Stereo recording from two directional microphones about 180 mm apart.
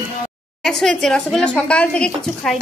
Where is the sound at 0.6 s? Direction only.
Centre (ahead or behind).